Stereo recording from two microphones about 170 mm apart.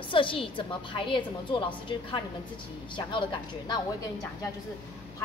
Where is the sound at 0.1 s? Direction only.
30° left (ahead or behind).